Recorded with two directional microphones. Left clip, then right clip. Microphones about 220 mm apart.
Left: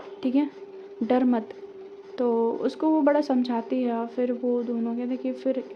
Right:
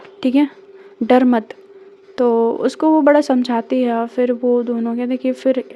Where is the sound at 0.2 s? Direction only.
40° right (ahead or behind).